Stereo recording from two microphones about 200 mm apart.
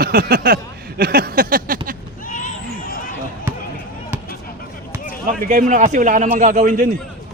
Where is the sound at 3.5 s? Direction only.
10° right (ahead or behind).